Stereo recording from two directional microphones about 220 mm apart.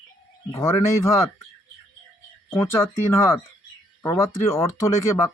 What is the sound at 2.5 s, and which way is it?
Speech, 10° left (ahead or behind).